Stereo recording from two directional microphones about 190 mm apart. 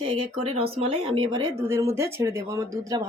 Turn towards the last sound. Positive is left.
turn(degrees=-15)  # may be behind; listen again after turning